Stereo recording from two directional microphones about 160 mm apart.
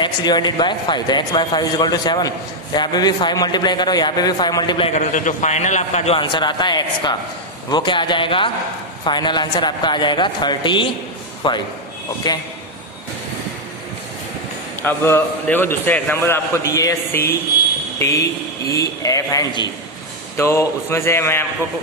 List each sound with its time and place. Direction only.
0.0 s a man's voice: 25° left (ahead or behind)
4.9 s a man's voice: 50° left (ahead or behind)
6.1 s a man's voice: 30° left (ahead or behind)
14.8 s a man's voice: 15° left (ahead or behind)